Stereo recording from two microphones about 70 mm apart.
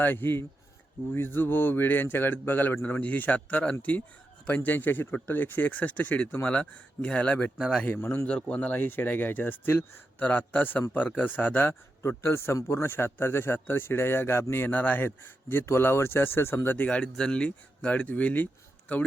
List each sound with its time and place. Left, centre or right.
0.0 s speech: left
7.9 s speech: left
8.3 s speech: centre
12.0 s speech: left
16.8 s speech: centre